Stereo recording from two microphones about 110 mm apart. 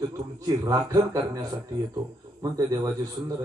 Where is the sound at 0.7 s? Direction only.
35° right (ahead or behind).